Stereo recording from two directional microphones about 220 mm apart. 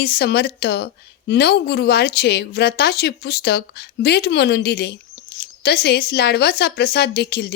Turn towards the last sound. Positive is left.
turn(degrees=45)  # may be behind; listen again after turning